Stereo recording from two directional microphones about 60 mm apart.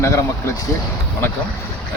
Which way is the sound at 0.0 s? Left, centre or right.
Left.